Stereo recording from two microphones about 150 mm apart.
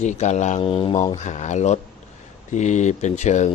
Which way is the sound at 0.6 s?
35° left (ahead or behind).